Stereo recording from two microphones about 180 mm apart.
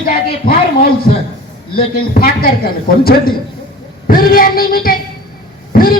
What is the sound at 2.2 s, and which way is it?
Speech, 55° left (ahead or behind).